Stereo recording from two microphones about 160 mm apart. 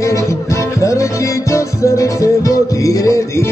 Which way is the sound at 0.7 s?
20° left (ahead or behind).